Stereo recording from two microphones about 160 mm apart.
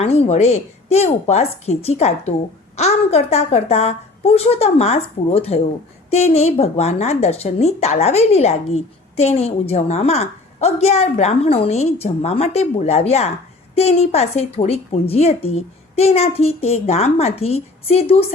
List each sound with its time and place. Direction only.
0.0 s a woman's voice: 40° left (ahead or behind)